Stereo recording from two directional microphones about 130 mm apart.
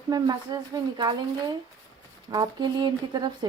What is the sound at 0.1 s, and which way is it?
Speech, 30° right (ahead or behind).